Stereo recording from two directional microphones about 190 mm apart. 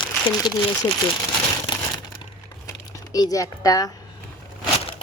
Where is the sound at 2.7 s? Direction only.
20° left (ahead or behind).